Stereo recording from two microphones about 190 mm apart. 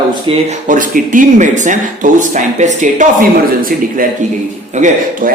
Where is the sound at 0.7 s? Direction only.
45° right (ahead or behind).